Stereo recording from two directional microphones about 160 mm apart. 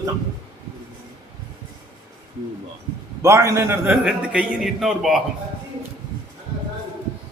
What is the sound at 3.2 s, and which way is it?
A man's voice, 20° right (ahead or behind).